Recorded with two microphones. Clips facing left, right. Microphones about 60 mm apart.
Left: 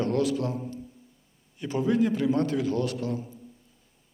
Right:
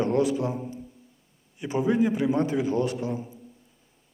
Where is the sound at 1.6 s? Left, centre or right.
Centre.